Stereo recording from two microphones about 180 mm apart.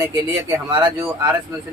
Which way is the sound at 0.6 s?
25° right (ahead or behind).